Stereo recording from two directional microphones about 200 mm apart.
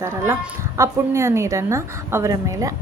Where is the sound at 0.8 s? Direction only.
15° right (ahead or behind).